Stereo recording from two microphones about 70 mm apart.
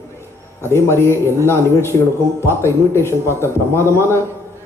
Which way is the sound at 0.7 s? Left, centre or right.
Left.